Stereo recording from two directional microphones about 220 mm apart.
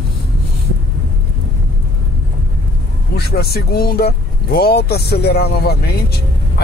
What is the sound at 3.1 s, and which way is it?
Speech, 45° left (ahead or behind).